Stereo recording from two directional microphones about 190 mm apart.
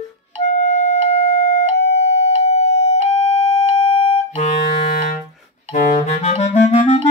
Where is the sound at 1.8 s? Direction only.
60° left (ahead or behind).